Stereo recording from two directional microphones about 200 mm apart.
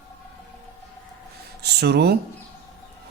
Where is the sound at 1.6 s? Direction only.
55° right (ahead or behind).